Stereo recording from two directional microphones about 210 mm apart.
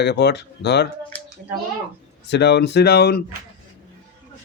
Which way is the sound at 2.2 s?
55° left (ahead or behind).